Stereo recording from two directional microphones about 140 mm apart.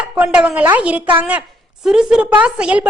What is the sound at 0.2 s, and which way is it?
A woman's voice, 10° right (ahead or behind).